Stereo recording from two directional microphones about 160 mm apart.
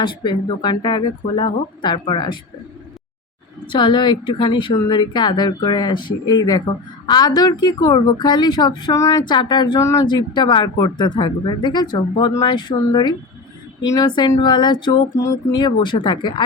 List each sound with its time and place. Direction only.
0.0 s a woman's voice: 30° left (ahead or behind)
3.7 s a woman's voice: 30° left (ahead or behind)